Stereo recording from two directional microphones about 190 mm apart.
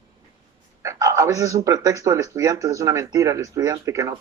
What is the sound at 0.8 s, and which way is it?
Speech, 15° right (ahead or behind).